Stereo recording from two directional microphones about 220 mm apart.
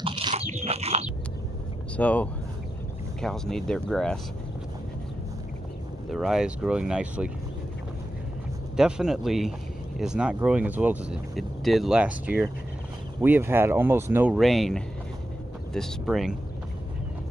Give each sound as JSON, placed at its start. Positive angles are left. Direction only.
{"t": 0.0, "sound": "biting", "side_deg": -25}
{"t": 2.0, "sound": "speech", "side_deg": 5}
{"t": 6.0, "sound": "speech", "side_deg": 0}
{"t": 8.7, "sound": "speech", "side_deg": -5}